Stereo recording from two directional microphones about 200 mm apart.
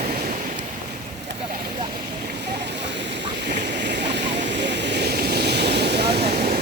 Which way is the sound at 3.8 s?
60° right (ahead or behind).